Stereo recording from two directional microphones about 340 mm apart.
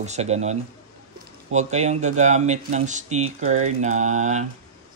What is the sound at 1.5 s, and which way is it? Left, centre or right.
Speech, centre.